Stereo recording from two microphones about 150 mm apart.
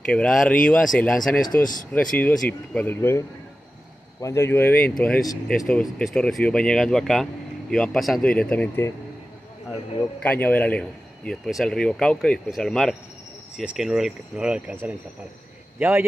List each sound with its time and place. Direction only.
0.1 s a man's voice: 5° left (ahead or behind)
1.4 s speech: 65° left (ahead or behind)
1.9 s a man's voice: 10° left (ahead or behind)
10.2 s a man's voice: 10° left (ahead or behind); by 16.1 s 15° right (ahead or behind)